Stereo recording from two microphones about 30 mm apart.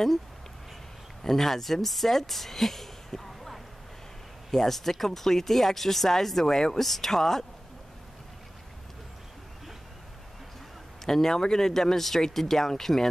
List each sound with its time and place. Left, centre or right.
1.2 s speech: centre
6.8 s speech: centre
11.1 s speech: centre